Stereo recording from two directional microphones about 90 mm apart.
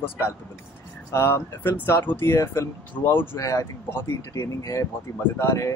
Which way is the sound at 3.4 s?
35° left (ahead or behind).